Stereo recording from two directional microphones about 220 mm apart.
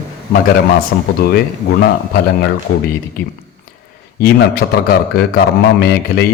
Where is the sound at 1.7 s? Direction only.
50° left (ahead or behind).